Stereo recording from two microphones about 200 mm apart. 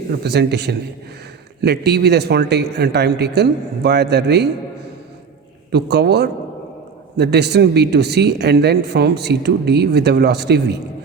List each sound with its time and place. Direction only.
0.2 s speech: 55° right (ahead or behind)
5.7 s speech: 55° right (ahead or behind)